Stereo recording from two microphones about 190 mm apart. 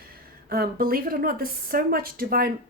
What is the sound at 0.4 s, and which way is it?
Speech, 50° right (ahead or behind).